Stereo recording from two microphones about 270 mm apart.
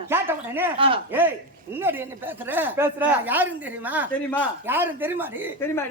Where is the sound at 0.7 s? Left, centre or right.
Centre.